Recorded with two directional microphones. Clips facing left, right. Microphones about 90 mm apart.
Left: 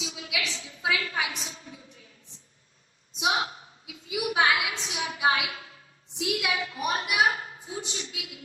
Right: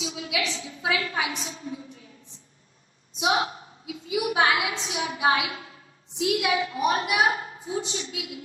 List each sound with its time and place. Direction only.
0.0 s a woman's voice: 30° right (ahead or behind)
3.2 s a woman's voice: 30° right (ahead or behind)